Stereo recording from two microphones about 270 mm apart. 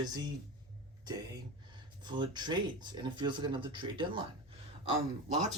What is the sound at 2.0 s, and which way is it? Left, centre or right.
Speech, centre.